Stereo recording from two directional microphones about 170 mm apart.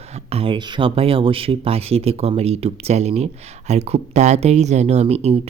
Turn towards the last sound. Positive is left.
turn(degrees=-35)  # may be behind; listen again after turning